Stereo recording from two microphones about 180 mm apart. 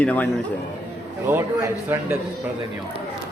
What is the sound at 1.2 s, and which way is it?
Speech, 15° right (ahead or behind).